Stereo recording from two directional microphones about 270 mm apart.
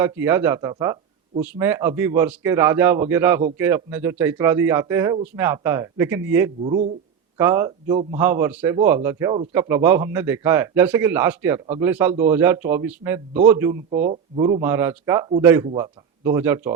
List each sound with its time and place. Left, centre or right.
0.0 s a man's voice: centre
6.6 s speech: right
7.3 s a man's voice: centre
14.6 s a man's voice: centre